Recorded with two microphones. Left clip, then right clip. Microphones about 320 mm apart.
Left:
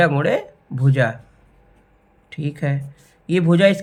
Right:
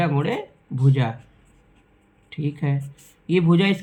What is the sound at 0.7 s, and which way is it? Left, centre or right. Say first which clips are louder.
Speech: left 6 dB; left.